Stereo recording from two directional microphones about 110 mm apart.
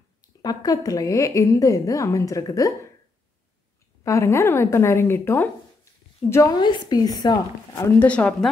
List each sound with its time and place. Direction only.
0.4 s a woman's voice: 35° left (ahead or behind)
4.0 s a woman's voice: 25° left (ahead or behind)
6.5 s a woman's voice: 40° left (ahead or behind)
8.0 s speech: 15° left (ahead or behind)